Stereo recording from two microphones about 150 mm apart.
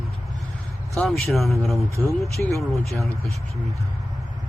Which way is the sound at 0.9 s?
Centre (ahead or behind).